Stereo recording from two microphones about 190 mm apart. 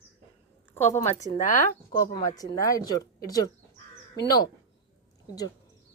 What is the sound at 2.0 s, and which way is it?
Speech, 20° left (ahead or behind).